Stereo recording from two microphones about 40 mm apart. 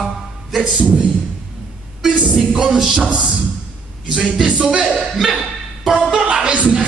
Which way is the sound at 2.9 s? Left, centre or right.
Right.